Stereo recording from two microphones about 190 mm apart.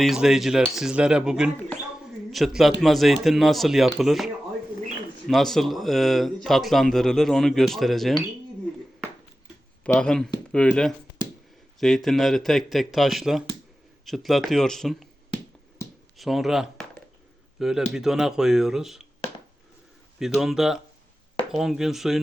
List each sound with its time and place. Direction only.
0.0 s speech: centre (ahead or behind)
5.3 s speech: centre (ahead or behind)
9.8 s speech: 5° left (ahead or behind)
16.1 s speech: centre (ahead or behind)
20.1 s speech: centre (ahead or behind)